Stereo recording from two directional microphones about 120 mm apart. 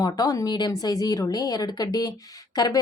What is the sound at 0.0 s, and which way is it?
A woman's voice, 30° left (ahead or behind).